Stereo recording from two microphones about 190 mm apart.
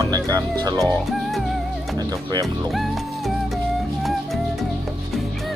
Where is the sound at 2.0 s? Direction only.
20° right (ahead or behind).